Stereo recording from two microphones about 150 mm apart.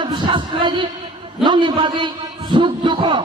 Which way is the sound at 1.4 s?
30° right (ahead or behind).